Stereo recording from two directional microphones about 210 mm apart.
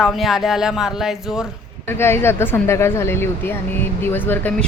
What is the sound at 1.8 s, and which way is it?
A woman's voice, 10° left (ahead or behind).